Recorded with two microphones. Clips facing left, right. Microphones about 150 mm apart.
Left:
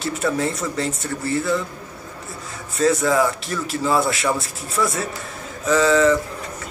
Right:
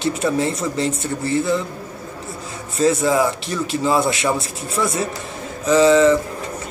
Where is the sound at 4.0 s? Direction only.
Centre (ahead or behind).